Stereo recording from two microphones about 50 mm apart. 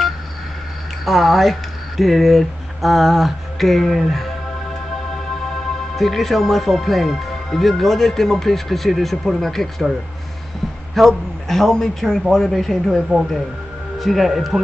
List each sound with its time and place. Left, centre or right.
1.0 s speech: centre
11.0 s a man's voice: centre